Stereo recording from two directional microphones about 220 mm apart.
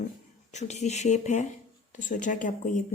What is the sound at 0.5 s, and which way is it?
A woman's voice, 30° left (ahead or behind).